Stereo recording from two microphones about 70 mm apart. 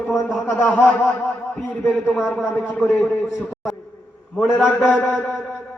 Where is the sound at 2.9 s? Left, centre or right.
Left.